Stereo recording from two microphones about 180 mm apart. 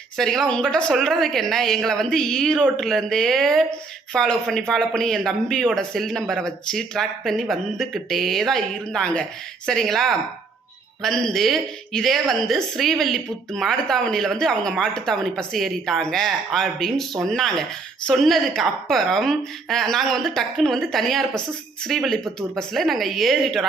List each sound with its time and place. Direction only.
0.2 s a woman's voice: centre (ahead or behind)